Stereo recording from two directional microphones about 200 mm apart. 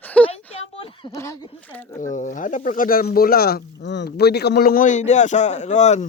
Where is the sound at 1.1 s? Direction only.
15° left (ahead or behind).